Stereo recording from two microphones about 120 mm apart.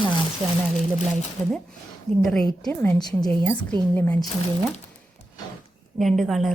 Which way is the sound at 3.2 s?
15° left (ahead or behind).